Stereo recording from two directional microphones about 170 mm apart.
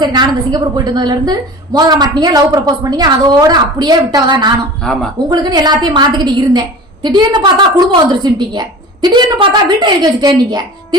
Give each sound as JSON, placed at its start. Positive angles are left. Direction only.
{"t": 0.0, "sound": "a woman's voice", "side_deg": -25}
{"t": 4.8, "sound": "a woman's voice", "side_deg": 5}
{"t": 5.3, "sound": "a woman's voice", "side_deg": -25}